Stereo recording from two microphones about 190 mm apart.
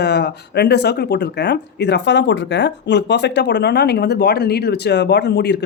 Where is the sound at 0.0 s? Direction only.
60° left (ahead or behind).